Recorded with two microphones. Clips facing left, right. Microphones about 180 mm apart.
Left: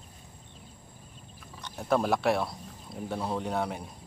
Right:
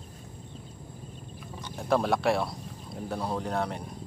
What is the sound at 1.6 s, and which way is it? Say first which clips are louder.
A man's voice: right 1 dB; centre (ahead or behind).